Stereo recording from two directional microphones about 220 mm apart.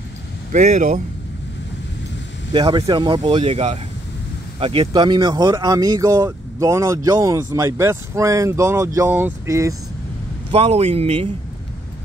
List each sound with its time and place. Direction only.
0.5 s speech: 35° right (ahead or behind)
2.5 s speech: 20° right (ahead or behind)
10.5 s speech: 25° right (ahead or behind)